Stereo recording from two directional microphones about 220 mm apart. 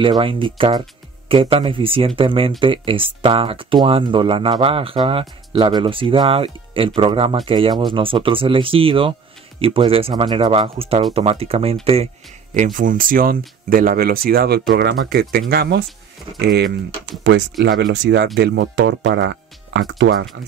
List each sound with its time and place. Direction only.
0.0 s speech: 25° right (ahead or behind)
12.5 s speech: 35° right (ahead or behind); by 20.2 s 60° right (ahead or behind)